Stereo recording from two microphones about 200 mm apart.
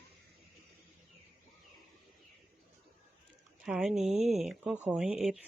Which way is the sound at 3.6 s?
5° right (ahead or behind).